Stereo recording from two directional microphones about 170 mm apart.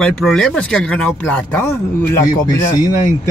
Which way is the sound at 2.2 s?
20° left (ahead or behind).